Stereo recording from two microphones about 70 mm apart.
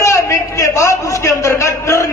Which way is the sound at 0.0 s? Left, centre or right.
Left.